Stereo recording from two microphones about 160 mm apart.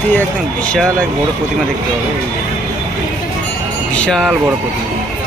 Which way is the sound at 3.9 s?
5° left (ahead or behind).